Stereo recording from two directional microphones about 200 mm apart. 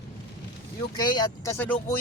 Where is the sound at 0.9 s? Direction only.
20° left (ahead or behind).